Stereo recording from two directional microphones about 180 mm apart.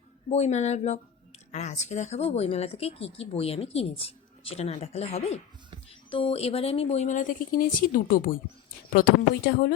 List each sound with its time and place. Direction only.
0.3 s speech: 40° left (ahead or behind)
9.5 s a woman's voice: 55° left (ahead or behind)